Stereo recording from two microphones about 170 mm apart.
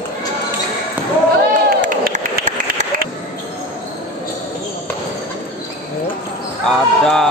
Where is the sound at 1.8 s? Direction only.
50° right (ahead or behind).